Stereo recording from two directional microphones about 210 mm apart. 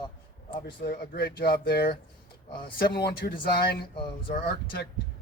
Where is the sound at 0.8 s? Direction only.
50° left (ahead or behind).